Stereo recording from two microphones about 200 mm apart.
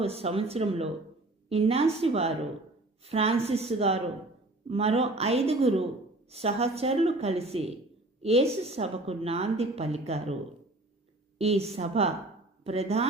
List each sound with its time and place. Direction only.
0.0 s a woman's voice: 30° right (ahead or behind)
11.3 s a woman's voice: 30° right (ahead or behind)